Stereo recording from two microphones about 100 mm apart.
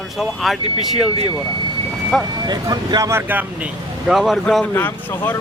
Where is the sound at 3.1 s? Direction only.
20° right (ahead or behind).